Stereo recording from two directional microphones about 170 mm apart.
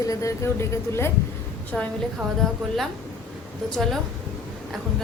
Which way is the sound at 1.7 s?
5° left (ahead or behind).